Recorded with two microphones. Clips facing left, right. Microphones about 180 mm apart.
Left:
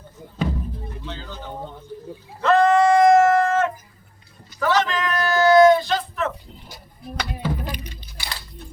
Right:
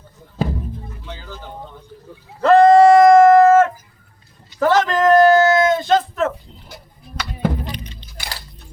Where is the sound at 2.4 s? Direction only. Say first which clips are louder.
Right 7 dB; 35° right (ahead or behind).